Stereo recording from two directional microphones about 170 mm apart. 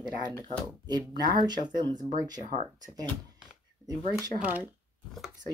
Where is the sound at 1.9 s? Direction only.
45° right (ahead or behind).